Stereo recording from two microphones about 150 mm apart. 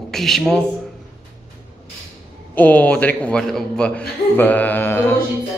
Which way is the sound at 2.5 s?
10° left (ahead or behind).